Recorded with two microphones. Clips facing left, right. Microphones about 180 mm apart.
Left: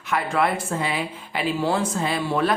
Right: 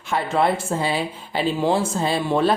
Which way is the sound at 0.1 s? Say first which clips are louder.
Right 2 dB; 25° right (ahead or behind).